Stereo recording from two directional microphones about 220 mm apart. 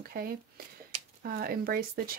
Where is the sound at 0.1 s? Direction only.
40° right (ahead or behind).